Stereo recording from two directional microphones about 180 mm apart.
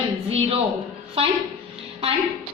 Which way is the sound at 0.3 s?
35° right (ahead or behind).